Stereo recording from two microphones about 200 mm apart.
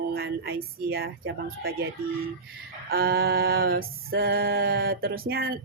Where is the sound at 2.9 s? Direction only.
50° right (ahead or behind).